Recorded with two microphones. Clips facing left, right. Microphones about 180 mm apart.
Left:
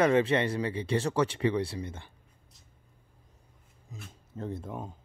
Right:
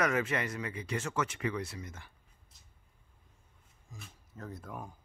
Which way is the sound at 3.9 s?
20° left (ahead or behind).